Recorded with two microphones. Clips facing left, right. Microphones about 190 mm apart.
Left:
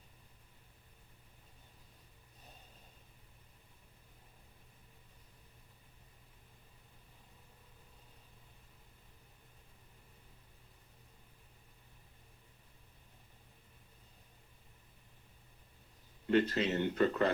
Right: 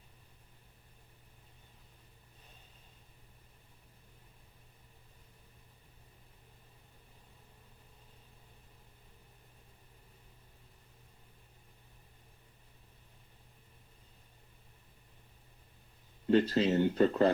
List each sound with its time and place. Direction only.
16.3 s speech: 30° right (ahead or behind)